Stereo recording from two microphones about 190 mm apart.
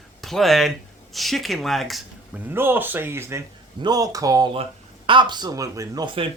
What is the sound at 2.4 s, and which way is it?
Speech, 10° right (ahead or behind).